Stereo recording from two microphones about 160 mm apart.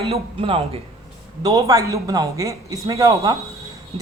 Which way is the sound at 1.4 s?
25° right (ahead or behind).